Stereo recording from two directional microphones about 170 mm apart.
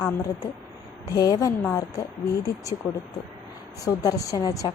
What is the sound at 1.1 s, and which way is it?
A woman's voice, 20° left (ahead or behind).